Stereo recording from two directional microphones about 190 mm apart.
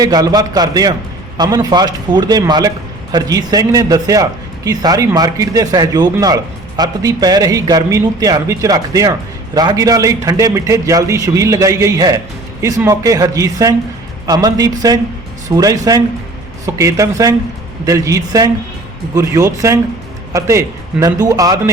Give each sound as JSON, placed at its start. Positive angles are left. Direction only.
{"t": 0.0, "sound": "a man's voice", "side_deg": -20}